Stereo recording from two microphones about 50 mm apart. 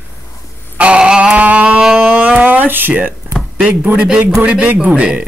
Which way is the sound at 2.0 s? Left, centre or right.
Right.